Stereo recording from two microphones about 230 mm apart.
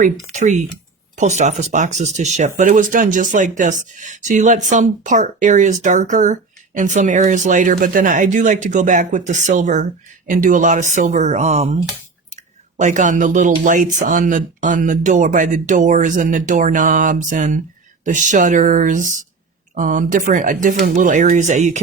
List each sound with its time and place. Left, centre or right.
0.0 s speech: right